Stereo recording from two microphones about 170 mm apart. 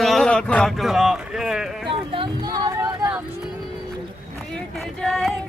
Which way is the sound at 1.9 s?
30° right (ahead or behind).